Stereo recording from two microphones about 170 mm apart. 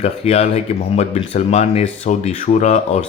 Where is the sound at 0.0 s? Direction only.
40° left (ahead or behind).